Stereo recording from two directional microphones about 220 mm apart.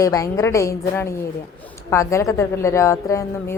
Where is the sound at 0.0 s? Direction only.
15° left (ahead or behind).